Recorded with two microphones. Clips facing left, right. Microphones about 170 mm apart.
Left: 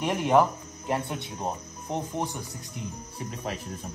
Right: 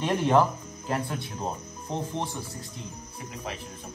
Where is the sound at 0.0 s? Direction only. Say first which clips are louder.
Even; 10° left (ahead or behind).